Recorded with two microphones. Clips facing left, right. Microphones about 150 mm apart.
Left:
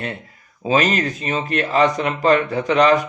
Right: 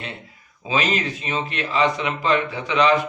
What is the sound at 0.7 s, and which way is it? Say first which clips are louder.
A man's voice: left 5 dB; 45° left (ahead or behind).